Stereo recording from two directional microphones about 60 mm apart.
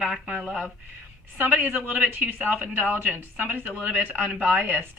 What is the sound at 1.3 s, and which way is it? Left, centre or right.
Speech, right.